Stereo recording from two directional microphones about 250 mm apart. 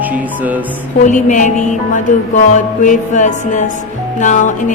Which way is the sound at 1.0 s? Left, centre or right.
Left.